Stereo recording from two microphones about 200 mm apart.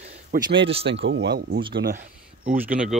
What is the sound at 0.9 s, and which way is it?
Speech, 65° right (ahead or behind).